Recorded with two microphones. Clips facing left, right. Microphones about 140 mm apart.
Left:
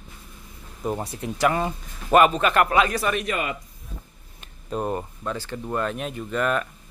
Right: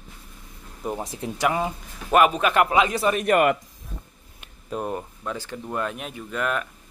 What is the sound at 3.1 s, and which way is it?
Speech, 55° right (ahead or behind).